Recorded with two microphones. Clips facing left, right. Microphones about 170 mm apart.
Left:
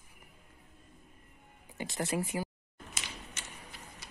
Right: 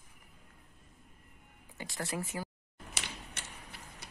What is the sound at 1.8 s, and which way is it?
Speech, 20° left (ahead or behind).